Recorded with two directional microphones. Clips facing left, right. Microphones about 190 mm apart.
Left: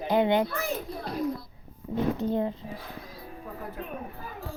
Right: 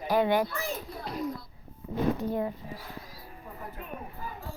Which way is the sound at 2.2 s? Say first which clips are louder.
Left 3 dB; 25° left (ahead or behind).